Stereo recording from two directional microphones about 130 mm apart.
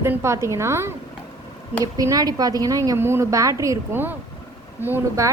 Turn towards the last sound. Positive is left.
turn(degrees=-20)  # may be behind; listen again after turning